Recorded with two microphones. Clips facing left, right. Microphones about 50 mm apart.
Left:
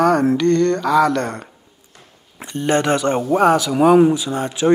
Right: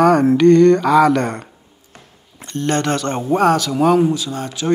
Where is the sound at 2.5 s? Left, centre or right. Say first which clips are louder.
Left 1 dB; centre.